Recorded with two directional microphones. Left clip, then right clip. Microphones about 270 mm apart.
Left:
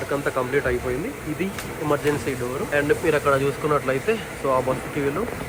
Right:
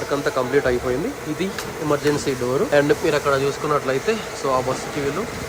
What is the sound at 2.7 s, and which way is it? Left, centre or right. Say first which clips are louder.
Speech: right 1 dB; centre.